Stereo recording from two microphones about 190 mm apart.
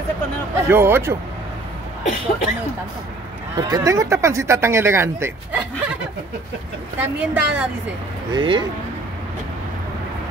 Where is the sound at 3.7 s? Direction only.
20° right (ahead or behind).